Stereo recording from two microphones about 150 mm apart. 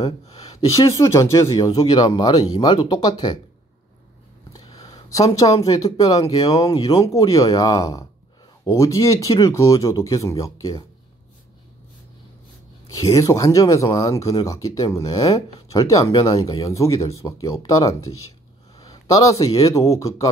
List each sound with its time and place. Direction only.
0.0 s speech: 25° left (ahead or behind)
4.7 s speech: 25° left (ahead or behind)
12.9 s speech: 20° left (ahead or behind)